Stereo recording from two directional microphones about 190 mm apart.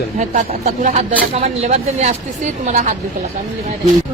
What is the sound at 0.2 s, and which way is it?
Speech, 40° right (ahead or behind).